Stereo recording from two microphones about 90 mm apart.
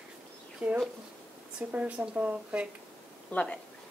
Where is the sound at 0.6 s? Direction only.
15° right (ahead or behind).